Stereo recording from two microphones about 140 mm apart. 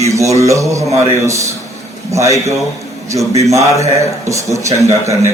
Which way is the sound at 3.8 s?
20° right (ahead or behind).